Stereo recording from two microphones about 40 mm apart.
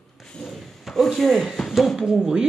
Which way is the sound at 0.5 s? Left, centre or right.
Centre.